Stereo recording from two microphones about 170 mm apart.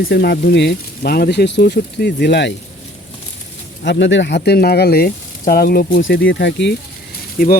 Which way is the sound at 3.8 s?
90° left.